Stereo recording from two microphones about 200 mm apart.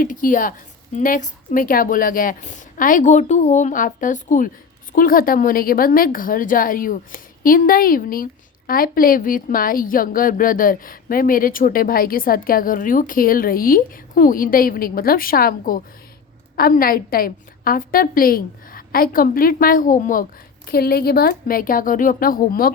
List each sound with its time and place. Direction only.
0.0 s a woman's voice: 40° left (ahead or behind)